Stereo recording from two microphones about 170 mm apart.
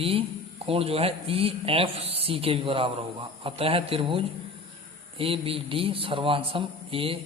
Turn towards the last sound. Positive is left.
turn(degrees=-30)  # may be behind; listen again after turning